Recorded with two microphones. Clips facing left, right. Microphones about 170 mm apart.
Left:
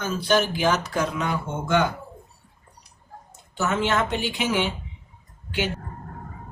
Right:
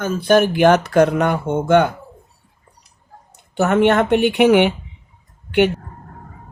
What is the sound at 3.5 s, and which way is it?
Speech, 60° right (ahead or behind).